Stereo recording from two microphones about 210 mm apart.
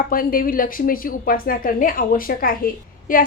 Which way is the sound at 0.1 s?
45° left (ahead or behind).